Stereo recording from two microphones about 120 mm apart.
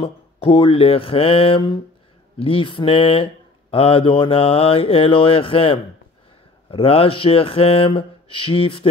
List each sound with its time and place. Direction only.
0.0 s mantra: 45° left (ahead or behind)